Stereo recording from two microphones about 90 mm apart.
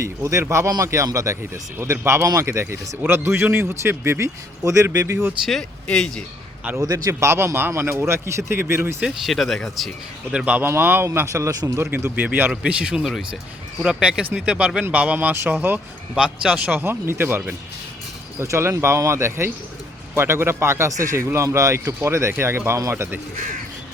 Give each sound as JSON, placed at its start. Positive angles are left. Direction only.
{"t": 0.0, "sound": "a man's voice", "side_deg": -35}
{"t": 5.5, "sound": "speech", "side_deg": 5}
{"t": 6.7, "sound": "a man's voice", "side_deg": -45}
{"t": 9.0, "sound": "speech", "side_deg": -5}
{"t": 10.3, "sound": "a man's voice", "side_deg": -15}
{"t": 16.1, "sound": "speech", "side_deg": -10}
{"t": 16.7, "sound": "a man's voice", "side_deg": -25}